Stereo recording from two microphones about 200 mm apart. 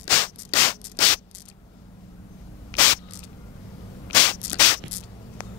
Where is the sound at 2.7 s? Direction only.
10° left (ahead or behind).